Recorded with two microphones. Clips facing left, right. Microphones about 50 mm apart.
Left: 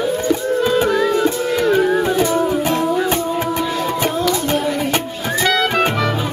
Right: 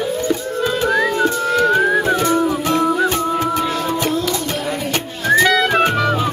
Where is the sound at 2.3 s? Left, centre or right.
Centre.